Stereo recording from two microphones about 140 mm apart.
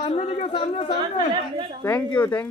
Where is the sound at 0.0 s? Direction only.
45° left (ahead or behind).